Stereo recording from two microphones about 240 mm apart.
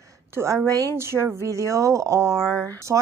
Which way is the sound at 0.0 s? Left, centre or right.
Centre.